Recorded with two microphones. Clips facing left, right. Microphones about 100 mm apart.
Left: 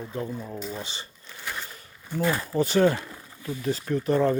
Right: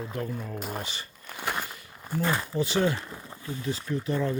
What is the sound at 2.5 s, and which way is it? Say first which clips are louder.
Speech: left 7 dB; 45° left (ahead or behind).